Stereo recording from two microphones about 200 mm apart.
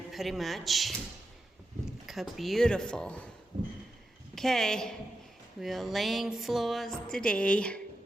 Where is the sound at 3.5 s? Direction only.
35° right (ahead or behind).